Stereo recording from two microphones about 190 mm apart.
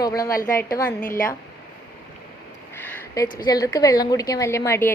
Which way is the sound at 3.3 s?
20° left (ahead or behind).